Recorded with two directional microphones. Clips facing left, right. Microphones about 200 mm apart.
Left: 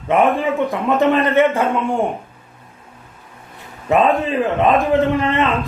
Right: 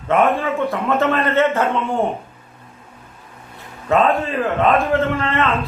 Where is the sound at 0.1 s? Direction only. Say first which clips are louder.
Left 1 dB; 15° left (ahead or behind).